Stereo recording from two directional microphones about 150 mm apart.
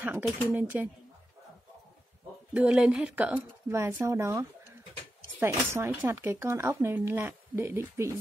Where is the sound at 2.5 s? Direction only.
5° right (ahead or behind).